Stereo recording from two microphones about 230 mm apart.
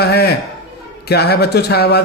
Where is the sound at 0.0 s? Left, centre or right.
Left.